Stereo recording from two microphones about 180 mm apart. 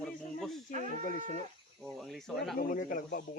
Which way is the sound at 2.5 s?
50° left (ahead or behind).